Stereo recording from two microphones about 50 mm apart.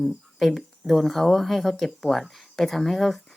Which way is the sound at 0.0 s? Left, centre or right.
Centre.